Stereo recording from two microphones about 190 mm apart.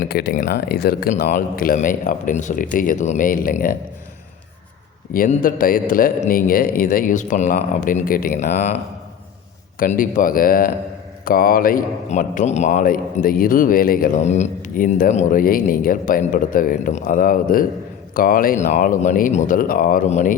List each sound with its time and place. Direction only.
0.1 s a man's voice: 55° left (ahead or behind)
5.1 s a man's voice: 45° left (ahead or behind)